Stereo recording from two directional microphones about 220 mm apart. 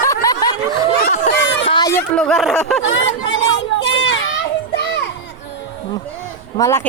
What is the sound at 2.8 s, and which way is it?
Hubbub, 60° left (ahead or behind).